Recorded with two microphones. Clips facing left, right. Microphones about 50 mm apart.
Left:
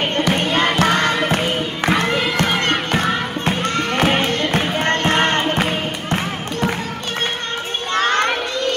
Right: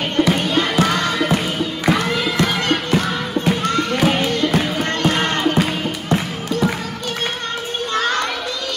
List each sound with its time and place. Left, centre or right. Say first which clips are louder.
0.1 s crowd: right 1 dB; left
1.3 s music: even; left
7.9 s children playing: left 3 dB; left